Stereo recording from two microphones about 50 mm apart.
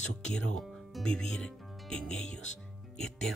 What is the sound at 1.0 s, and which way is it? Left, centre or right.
Speech, centre.